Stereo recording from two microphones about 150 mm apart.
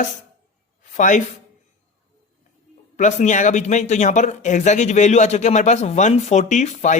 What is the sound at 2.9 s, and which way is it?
Speech, 55° left (ahead or behind).